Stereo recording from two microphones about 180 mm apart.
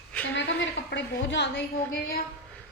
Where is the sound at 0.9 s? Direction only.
75° left (ahead or behind).